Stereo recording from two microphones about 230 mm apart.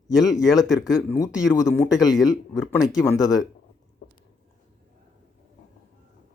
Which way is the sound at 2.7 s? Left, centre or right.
Centre.